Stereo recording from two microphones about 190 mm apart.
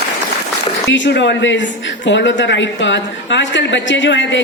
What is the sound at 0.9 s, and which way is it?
A woman's voice, 70° left (ahead or behind).